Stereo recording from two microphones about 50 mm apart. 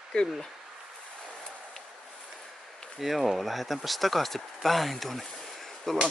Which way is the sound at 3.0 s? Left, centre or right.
Centre.